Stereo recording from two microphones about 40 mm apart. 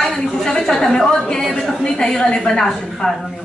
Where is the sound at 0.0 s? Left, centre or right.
Centre.